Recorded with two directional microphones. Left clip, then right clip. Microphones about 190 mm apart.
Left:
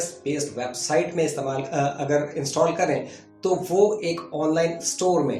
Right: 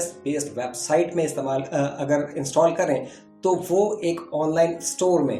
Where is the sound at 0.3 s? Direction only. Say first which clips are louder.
Even; 45° right (ahead or behind).